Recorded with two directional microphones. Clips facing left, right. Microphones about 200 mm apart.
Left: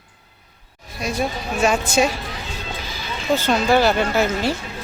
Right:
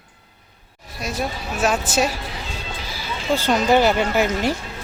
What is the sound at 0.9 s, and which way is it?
A woman's voice, 5° right (ahead or behind).